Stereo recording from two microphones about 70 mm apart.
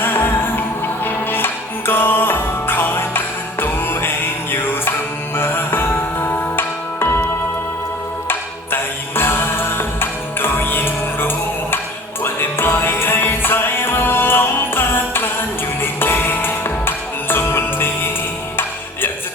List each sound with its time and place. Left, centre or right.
0.0 s music: left
8.3 s music: left